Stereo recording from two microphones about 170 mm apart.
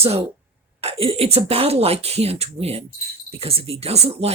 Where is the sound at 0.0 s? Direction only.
35° right (ahead or behind).